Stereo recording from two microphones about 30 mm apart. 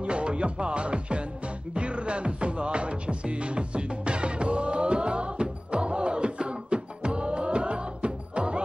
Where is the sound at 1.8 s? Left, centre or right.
Right.